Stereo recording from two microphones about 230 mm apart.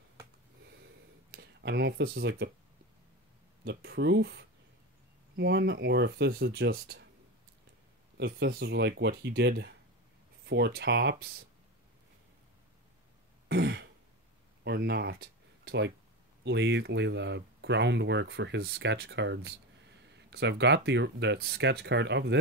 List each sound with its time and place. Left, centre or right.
1.3 s speech: right
3.6 s speech: right
8.2 s speech: right
13.5 s throat clearing: right
14.6 s speech: right